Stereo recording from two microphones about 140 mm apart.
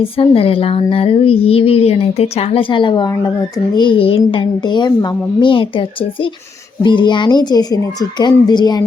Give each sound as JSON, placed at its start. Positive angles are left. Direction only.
{"t": 0.0, "sound": "speech", "side_deg": 40}
{"t": 6.8, "sound": "speech", "side_deg": 35}